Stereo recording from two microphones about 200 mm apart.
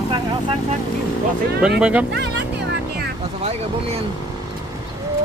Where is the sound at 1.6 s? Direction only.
5° right (ahead or behind).